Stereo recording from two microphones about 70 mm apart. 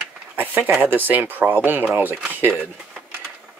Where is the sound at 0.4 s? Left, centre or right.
Right.